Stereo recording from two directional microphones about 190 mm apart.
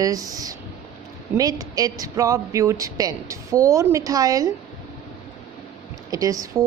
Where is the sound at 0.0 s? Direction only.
20° right (ahead or behind).